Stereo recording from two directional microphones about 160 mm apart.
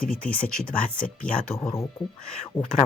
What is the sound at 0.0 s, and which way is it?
Speech, 65° left (ahead or behind).